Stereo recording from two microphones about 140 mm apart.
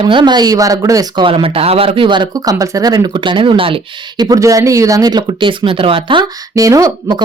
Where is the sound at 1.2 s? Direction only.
40° right (ahead or behind).